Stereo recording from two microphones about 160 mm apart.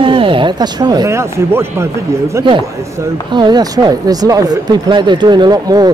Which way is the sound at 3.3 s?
25° right (ahead or behind).